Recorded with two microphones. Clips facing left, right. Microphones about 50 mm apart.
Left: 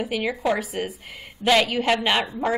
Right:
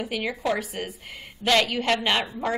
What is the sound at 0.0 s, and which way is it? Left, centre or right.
A woman's voice, centre.